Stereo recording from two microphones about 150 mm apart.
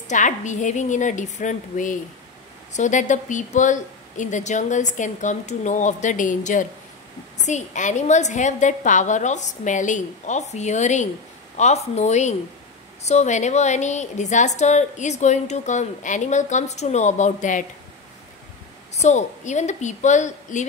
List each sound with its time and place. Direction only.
0.1 s a woman's voice: 55° left (ahead or behind)
18.9 s a woman's voice: 50° left (ahead or behind)